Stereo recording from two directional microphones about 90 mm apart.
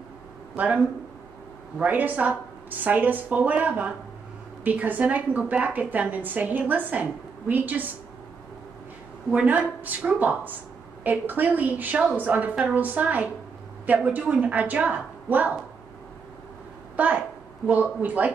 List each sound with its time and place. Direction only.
1.8 s a woman's voice: 20° right (ahead or behind)
9.3 s a woman's voice: 15° right (ahead or behind)
16.9 s a woman's voice: 15° right (ahead or behind)